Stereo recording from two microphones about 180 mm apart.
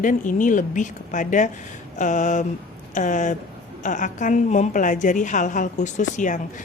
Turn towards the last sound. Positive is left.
turn(degrees=45)  # may be behind; listen again after turning